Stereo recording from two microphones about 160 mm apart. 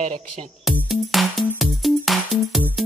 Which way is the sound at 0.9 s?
Centre (ahead or behind).